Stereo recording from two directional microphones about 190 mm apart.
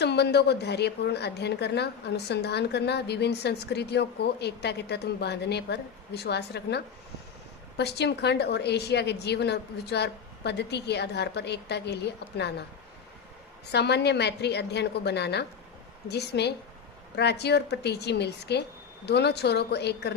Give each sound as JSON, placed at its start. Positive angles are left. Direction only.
{"t": 0.0, "sound": "a woman's voice", "side_deg": 60}
{"t": 13.7, "sound": "a woman's voice", "side_deg": 60}